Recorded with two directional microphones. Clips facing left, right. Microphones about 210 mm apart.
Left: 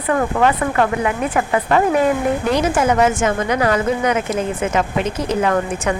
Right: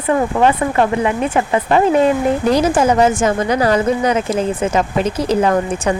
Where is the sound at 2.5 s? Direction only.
35° right (ahead or behind).